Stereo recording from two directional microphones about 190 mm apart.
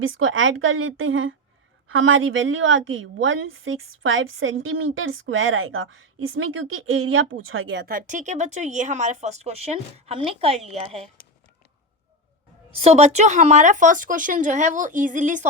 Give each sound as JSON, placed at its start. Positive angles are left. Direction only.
{"t": 0.0, "sound": "a woman's voice", "side_deg": -90}
{"t": 7.9, "sound": "speech", "side_deg": -45}
{"t": 11.2, "sound": "a sound", "side_deg": 50}
{"t": 12.7, "sound": "speech", "side_deg": -35}